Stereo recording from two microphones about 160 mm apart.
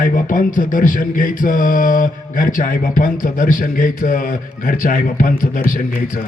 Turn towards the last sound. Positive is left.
turn(degrees=60)  # may be behind; listen again after turning